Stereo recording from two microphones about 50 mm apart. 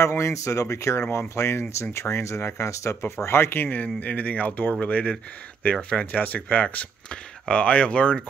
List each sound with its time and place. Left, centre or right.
0.2 s speech: left
3.3 s speech: left
3.8 s speech: left